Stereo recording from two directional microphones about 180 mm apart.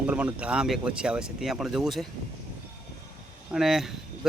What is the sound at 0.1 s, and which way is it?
Speech, 5° right (ahead or behind).